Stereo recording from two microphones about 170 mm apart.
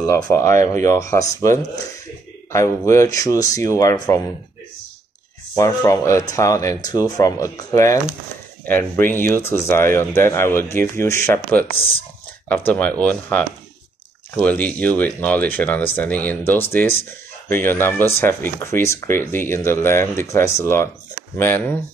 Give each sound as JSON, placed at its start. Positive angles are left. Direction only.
{"t": 0.0, "sound": "speech", "side_deg": 15}
{"t": 5.5, "sound": "speech", "side_deg": 20}
{"t": 11.6, "sound": "speech", "side_deg": 35}
{"t": 12.4, "sound": "speech", "side_deg": 10}